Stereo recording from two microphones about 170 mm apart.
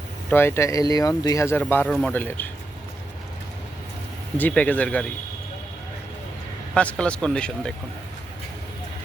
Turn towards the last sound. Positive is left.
turn(degrees=5)  # may be behind; listen again after turning